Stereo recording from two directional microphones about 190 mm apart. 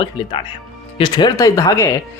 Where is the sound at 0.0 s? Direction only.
25° left (ahead or behind).